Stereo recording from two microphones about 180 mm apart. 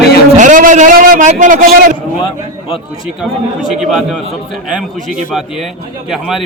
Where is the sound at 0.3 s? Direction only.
45° right (ahead or behind).